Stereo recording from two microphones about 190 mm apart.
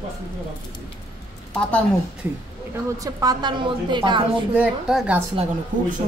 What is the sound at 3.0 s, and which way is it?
A woman's voice, 20° right (ahead or behind).